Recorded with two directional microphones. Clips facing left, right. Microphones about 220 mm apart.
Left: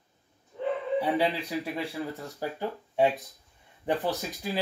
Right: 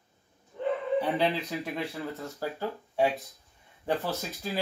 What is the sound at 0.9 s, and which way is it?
Speech, 15° left (ahead or behind).